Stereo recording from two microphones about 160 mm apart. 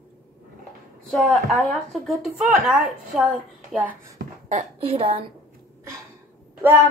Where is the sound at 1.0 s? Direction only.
Centre (ahead or behind).